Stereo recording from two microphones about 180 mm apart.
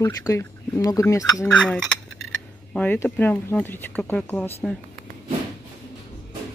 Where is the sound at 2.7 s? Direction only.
10° left (ahead or behind).